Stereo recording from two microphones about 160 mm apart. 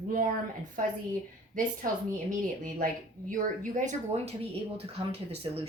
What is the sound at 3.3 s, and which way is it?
A woman's voice, 55° right (ahead or behind).